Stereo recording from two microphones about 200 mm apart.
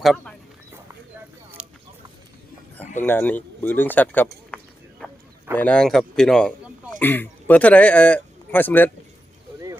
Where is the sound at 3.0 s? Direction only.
10° left (ahead or behind).